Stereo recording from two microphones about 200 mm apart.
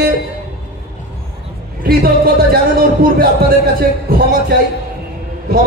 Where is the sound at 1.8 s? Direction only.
50° right (ahead or behind).